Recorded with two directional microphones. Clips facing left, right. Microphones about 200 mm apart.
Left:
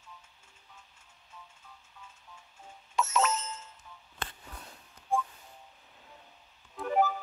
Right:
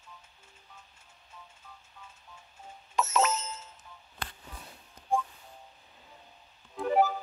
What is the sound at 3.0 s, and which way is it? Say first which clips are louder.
Bicycle bell: right 1 dB; 5° right (ahead or behind).